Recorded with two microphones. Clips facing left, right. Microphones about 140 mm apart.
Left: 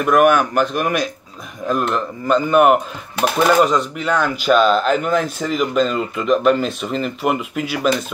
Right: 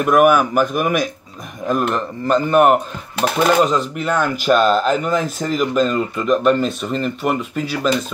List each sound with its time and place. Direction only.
0.0 s speech: 5° right (ahead or behind)